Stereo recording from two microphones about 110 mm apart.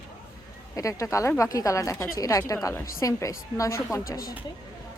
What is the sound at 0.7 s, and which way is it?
A woman's voice, 30° left (ahead or behind).